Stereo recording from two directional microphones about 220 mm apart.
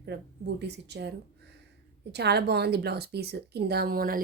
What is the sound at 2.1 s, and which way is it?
Speech, 50° right (ahead or behind).